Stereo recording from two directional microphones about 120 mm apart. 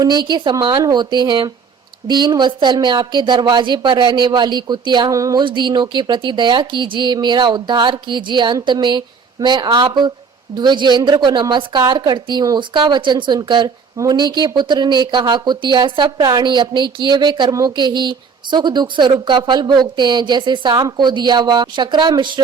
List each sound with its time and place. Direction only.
0.0 s a woman's voice: 35° right (ahead or behind)
5.4 s a woman's voice: 40° right (ahead or behind)